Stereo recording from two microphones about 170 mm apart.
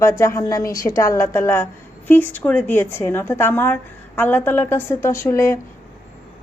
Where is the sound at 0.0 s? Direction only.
15° left (ahead or behind).